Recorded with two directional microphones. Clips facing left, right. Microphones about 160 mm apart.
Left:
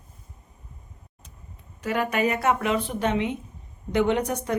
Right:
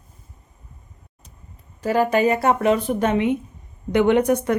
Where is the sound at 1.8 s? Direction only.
35° right (ahead or behind); by 4.5 s 60° right (ahead or behind).